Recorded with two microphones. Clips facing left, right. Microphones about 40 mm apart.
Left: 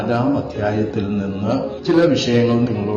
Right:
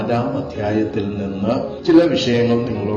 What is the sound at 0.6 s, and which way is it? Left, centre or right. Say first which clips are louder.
Speech: right 3 dB; centre.